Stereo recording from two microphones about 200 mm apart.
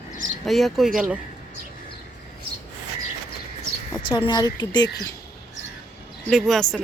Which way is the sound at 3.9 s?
25° left (ahead or behind).